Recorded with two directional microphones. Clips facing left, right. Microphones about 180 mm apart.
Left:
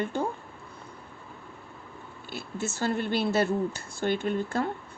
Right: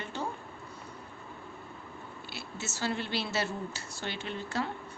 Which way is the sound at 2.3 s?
50° left (ahead or behind).